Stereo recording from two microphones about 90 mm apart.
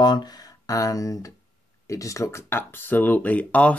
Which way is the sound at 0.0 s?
50° left (ahead or behind).